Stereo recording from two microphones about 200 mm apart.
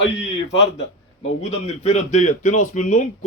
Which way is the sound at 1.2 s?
30° left (ahead or behind).